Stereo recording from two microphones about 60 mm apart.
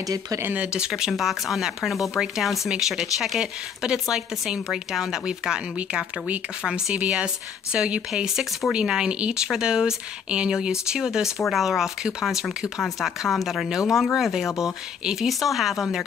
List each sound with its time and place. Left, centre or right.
0.6 s speech: centre
6.6 s speech: centre
8.1 s speech: centre